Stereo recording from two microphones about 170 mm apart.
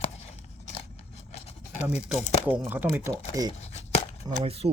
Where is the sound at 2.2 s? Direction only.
40° left (ahead or behind).